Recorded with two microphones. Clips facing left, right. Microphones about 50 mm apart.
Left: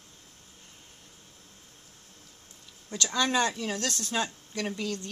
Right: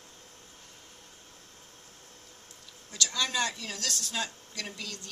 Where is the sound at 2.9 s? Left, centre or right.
Left.